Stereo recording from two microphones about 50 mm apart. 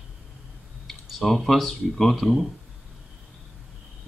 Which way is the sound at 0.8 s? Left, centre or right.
Centre.